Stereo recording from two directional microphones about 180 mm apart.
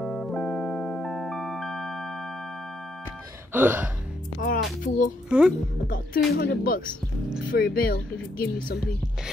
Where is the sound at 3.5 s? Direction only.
10° right (ahead or behind).